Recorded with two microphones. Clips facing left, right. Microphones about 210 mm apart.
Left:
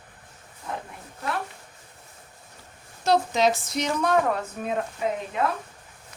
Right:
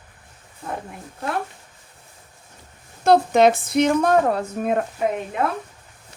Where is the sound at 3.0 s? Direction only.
55° right (ahead or behind).